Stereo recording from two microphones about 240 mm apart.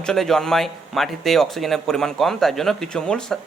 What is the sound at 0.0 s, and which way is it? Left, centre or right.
Speech, centre.